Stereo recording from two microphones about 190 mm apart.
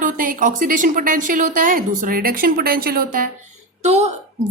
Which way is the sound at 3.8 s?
35° right (ahead or behind).